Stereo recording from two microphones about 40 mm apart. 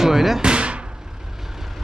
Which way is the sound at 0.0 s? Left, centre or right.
Centre.